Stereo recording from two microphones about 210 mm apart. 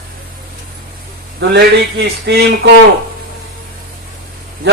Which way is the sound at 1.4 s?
55° right (ahead or behind).